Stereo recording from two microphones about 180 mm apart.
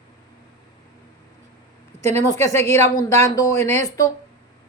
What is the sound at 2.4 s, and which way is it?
Speech, 15° left (ahead or behind).